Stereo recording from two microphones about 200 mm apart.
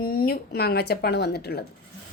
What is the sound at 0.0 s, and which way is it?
Speech, 50° left (ahead or behind).